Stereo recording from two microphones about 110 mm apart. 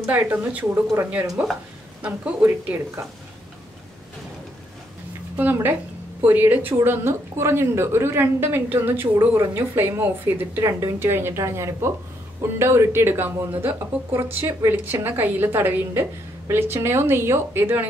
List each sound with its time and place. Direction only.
0.0 s speech: 15° right (ahead or behind)
5.3 s a woman's voice: 20° right (ahead or behind)
10.6 s speech: 30° right (ahead or behind)